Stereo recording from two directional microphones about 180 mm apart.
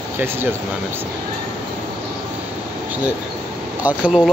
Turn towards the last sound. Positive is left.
turn(degrees=-5)  # may be behind; listen again after turning